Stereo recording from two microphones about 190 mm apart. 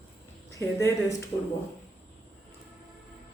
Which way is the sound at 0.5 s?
15° left (ahead or behind).